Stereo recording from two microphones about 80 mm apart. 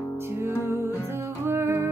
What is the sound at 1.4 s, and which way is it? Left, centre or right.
Music, right.